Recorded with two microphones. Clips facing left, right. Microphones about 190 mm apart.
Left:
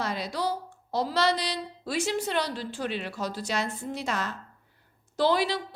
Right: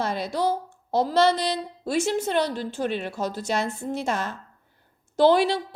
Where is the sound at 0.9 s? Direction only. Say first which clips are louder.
Right 5 dB; 50° right (ahead or behind).